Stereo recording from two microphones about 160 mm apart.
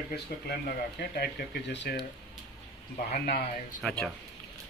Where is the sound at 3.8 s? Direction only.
5° left (ahead or behind).